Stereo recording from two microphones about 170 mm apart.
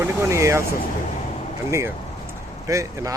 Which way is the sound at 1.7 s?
15° right (ahead or behind).